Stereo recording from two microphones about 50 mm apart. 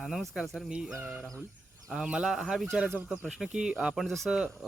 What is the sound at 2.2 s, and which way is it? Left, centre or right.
Speech, centre.